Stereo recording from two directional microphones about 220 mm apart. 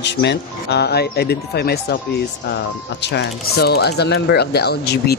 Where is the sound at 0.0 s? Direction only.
50° left (ahead or behind).